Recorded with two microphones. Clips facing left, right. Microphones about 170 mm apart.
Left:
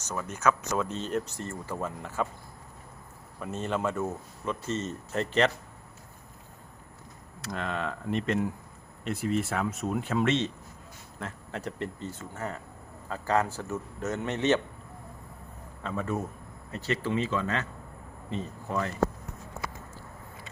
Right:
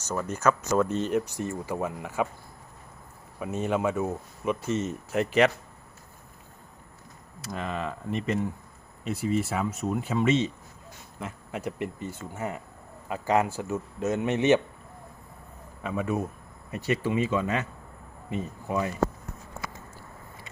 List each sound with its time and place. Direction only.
0.4 s speech: 5° right (ahead or behind)
3.4 s speech: 10° right (ahead or behind)
7.4 s a man's voice: 5° right (ahead or behind)
15.8 s speech: 10° right (ahead or behind)